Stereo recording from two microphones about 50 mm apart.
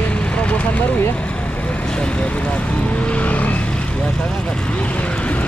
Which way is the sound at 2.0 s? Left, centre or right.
Left.